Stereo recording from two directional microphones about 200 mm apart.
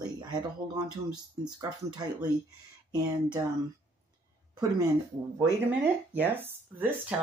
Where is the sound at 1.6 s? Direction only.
20° right (ahead or behind).